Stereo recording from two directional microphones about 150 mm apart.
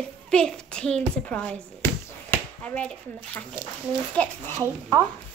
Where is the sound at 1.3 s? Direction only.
10° left (ahead or behind).